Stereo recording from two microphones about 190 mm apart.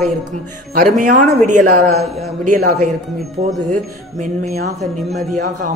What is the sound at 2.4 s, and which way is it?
A woman's voice, 40° right (ahead or behind).